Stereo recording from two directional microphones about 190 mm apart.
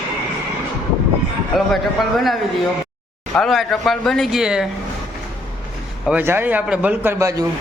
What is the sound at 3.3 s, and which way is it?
A man's voice, centre (ahead or behind).